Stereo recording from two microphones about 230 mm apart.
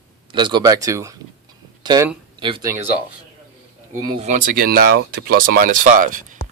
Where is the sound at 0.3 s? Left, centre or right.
Centre.